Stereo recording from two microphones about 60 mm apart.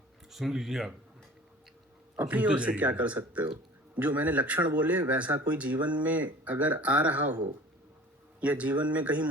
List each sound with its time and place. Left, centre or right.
0.3 s speech: centre
2.2 s speech: centre
8.4 s speech: right